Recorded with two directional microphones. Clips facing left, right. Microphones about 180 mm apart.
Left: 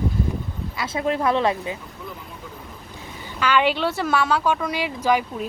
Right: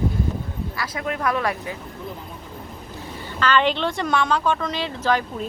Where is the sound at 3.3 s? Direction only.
10° left (ahead or behind).